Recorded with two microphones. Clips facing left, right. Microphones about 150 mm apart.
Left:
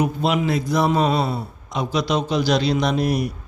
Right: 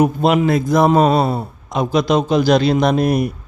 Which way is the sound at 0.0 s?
50° right (ahead or behind).